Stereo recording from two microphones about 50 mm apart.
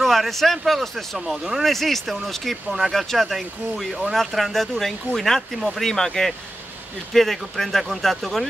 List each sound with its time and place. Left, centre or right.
0.0 s speech: centre